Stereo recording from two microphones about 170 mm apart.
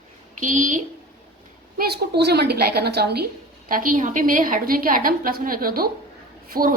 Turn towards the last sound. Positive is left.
turn(degrees=-55)  # may be behind; listen again after turning